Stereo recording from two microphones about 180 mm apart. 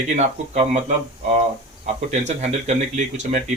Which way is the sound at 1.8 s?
40° right (ahead or behind).